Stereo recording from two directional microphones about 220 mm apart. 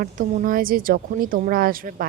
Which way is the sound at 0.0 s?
35° right (ahead or behind).